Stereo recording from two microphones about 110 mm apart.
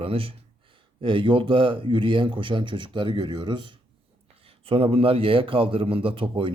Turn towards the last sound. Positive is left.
turn(degrees=-50)  # may be behind; listen again after turning